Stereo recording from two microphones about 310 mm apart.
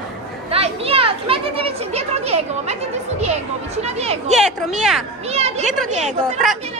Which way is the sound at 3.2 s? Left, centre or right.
Right.